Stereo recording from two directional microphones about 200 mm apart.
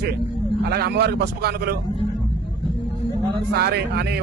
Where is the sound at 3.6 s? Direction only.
55° right (ahead or behind).